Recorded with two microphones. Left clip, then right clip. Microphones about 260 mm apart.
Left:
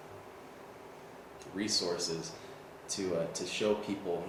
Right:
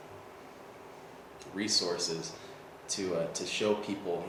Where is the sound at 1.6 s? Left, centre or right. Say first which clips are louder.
Right 2 dB; centre.